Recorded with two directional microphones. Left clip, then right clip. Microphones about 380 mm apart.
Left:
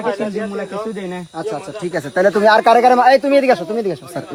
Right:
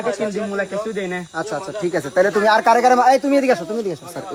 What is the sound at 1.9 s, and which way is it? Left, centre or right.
Speech, left.